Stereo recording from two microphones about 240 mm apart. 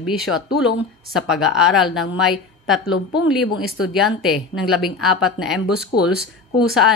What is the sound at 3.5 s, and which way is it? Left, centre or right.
Speech, left.